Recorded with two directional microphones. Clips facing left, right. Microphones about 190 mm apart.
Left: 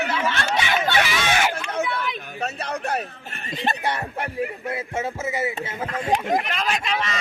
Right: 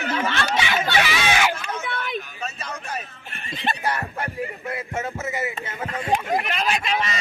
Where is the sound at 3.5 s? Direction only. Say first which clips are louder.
Left 2 dB; 45° left (ahead or behind).